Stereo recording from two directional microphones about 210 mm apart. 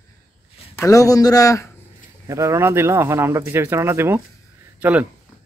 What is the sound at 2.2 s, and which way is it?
Speech, 15° right (ahead or behind).